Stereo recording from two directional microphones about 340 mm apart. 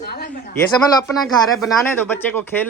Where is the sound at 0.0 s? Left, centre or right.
Left.